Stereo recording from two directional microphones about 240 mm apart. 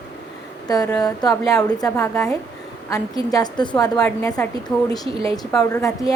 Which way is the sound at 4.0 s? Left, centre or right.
Centre.